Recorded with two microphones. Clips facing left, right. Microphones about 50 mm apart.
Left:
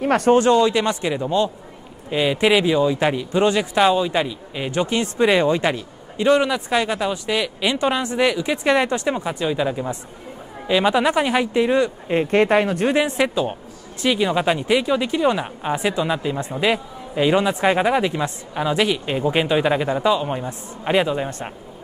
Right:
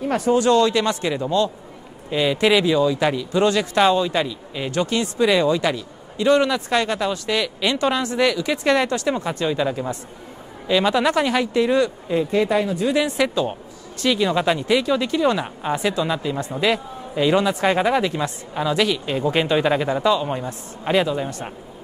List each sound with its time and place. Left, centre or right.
0.0 s speech: left
0.4 s a man's voice: left
5.0 s a man's voice: left
9.2 s a man's voice: centre
12.1 s speech: left
12.9 s speech: left
13.3 s a man's voice: centre
16.5 s a man's voice: centre